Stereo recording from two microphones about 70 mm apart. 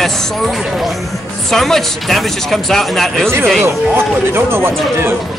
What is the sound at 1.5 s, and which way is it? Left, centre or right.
Speech, centre.